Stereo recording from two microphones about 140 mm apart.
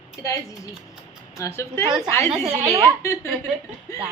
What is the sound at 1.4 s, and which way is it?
Speech, 20° left (ahead or behind).